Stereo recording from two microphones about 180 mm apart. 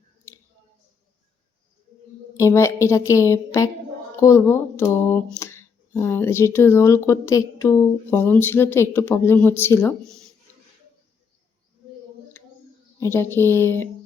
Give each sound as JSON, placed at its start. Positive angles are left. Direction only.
{"t": 2.4, "sound": "speech", "side_deg": 15}
{"t": 12.4, "sound": "a sound", "side_deg": 10}
{"t": 13.0, "sound": "speech", "side_deg": 15}